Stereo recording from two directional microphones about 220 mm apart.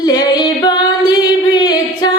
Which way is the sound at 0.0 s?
20° left (ahead or behind).